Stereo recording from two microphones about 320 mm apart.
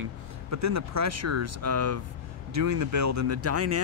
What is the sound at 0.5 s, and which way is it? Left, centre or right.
Speech, right.